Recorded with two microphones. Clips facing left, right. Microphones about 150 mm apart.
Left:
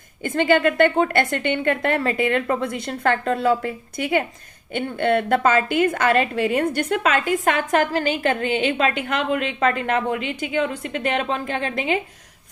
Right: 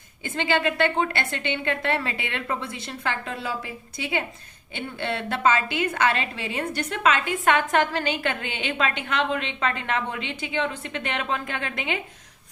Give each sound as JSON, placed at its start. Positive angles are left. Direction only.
{"t": 0.2, "sound": "a woman's voice", "side_deg": 50}